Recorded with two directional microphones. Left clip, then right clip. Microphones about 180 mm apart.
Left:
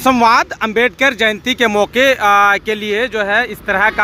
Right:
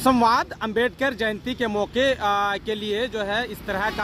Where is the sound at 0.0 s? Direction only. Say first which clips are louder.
Left 8 dB; 20° left (ahead or behind).